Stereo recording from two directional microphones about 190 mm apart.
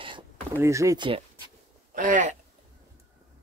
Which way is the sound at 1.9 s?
40° right (ahead or behind).